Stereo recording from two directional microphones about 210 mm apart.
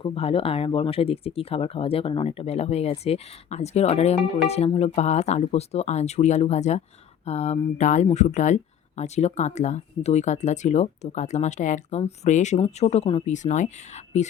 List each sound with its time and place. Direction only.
0.0 s speech: 25° left (ahead or behind)